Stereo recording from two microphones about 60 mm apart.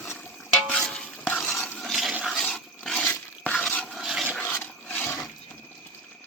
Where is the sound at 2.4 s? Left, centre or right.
Centre.